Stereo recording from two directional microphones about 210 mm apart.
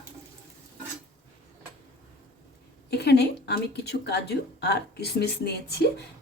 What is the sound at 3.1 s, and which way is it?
Speech, 50° left (ahead or behind).